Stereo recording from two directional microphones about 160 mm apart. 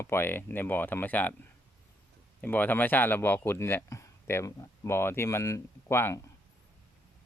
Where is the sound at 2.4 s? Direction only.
10° left (ahead or behind).